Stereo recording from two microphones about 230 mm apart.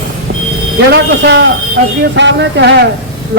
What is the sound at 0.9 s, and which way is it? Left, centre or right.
A man's voice, right.